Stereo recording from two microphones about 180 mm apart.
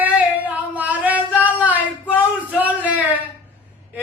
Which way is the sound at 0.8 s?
10° right (ahead or behind).